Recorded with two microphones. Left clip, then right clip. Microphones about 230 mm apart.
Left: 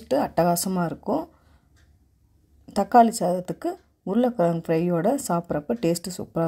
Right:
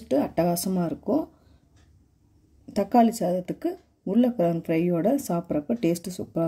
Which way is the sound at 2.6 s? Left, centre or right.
Left.